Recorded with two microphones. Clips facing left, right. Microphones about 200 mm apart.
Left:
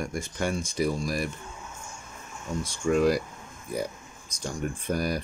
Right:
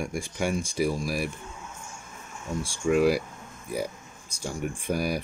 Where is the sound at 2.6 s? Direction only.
10° right (ahead or behind).